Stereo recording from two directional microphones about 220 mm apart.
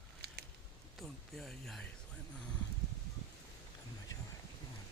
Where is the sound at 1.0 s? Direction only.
Centre (ahead or behind).